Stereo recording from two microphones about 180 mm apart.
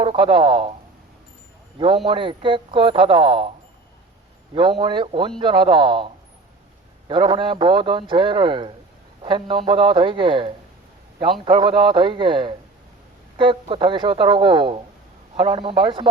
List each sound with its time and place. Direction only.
0.0 s speech: 30° right (ahead or behind)
2.0 s a man's voice: 30° right (ahead or behind)
4.5 s a man's voice: 30° right (ahead or behind)
7.1 s a man's voice: 25° right (ahead or behind)